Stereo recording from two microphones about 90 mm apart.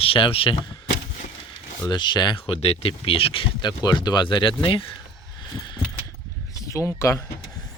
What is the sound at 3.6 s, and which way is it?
Speech, 55° left (ahead or behind).